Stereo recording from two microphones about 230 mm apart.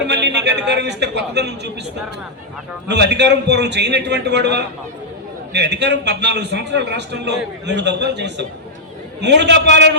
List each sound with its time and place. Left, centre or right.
0.1 s a man's voice: right
2.8 s a man's voice: right